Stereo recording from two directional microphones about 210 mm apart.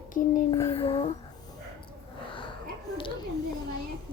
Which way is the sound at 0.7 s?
25° left (ahead or behind).